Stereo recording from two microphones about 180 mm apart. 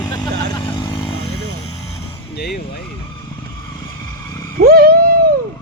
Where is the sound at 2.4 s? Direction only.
60° left (ahead or behind).